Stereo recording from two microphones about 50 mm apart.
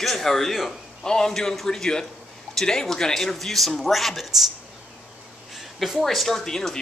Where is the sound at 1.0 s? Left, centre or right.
Centre.